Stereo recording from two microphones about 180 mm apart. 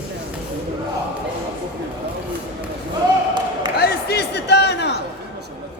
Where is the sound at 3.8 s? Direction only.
65° left (ahead or behind).